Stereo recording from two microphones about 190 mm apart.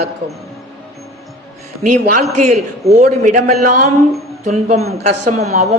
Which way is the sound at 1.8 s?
45° right (ahead or behind).